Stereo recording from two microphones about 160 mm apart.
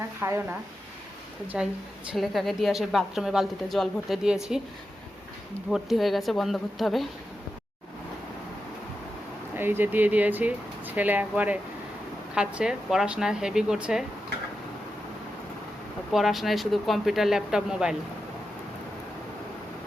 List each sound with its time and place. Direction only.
0.0 s speech: 15° right (ahead or behind)
1.5 s a woman's voice: 5° right (ahead or behind)
5.7 s a woman's voice: centre (ahead or behind)
9.6 s a woman's voice: 15° right (ahead or behind)
16.1 s a woman's voice: centre (ahead or behind)